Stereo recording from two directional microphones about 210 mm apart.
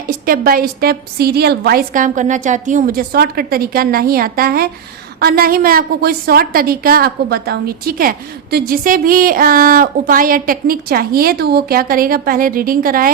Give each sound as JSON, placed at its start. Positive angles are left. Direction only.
{"t": 0.3, "sound": "a woman's voice", "side_deg": -45}